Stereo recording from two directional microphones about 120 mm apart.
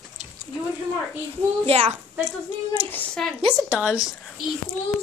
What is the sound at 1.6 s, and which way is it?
Speech, 55° right (ahead or behind).